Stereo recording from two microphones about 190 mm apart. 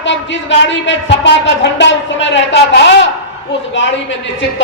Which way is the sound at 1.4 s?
70° left (ahead or behind).